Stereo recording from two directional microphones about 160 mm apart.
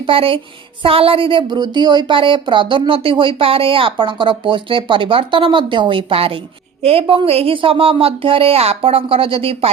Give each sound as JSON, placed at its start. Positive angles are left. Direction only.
{"t": 0.0, "sound": "speech", "side_deg": -35}